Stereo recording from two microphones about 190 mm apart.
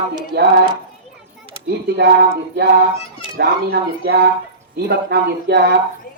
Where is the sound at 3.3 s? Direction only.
60° right (ahead or behind).